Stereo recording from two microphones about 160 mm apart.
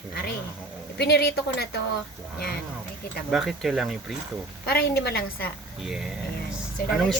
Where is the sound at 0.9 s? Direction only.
90° left.